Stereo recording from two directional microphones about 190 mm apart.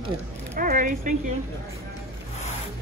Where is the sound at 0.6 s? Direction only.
45° right (ahead or behind).